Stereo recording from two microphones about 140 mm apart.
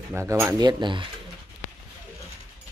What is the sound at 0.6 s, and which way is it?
Speech, 35° right (ahead or behind).